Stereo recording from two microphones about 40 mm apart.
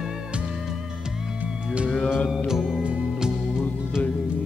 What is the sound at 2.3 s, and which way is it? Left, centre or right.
Music, centre.